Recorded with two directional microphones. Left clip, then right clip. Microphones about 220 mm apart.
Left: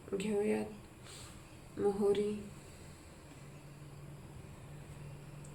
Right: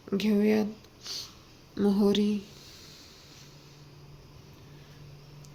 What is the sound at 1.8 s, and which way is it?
Speech, 45° right (ahead or behind).